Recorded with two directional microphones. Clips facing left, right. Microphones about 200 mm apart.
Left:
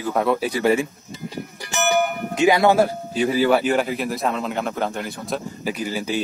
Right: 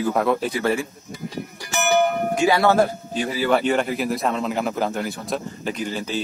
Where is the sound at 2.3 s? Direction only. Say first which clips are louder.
Left 4 dB; 20° left (ahead or behind).